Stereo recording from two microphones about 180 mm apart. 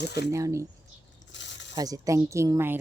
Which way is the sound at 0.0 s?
65° left (ahead or behind).